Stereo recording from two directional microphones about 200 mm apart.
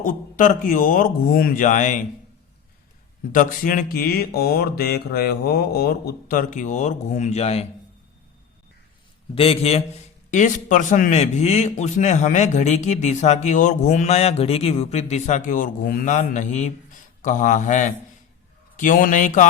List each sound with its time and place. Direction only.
0.0 s a man's voice: 40° left (ahead or behind)
3.3 s speech: 40° left (ahead or behind)
9.3 s a man's voice: 30° left (ahead or behind)